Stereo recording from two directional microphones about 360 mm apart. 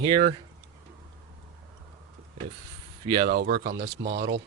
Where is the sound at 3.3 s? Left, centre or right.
Right.